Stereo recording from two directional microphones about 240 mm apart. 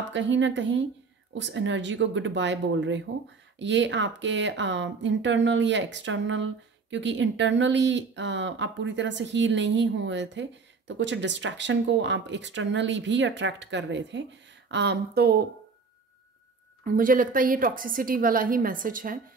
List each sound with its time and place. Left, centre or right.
0.1 s speech: right
16.8 s a woman's voice: right